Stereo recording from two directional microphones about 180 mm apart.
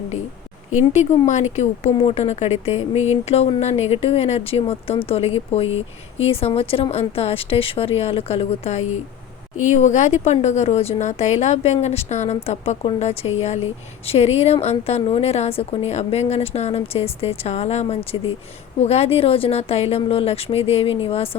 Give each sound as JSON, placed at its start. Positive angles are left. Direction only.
{"t": 1.5, "sound": "speech", "side_deg": 40}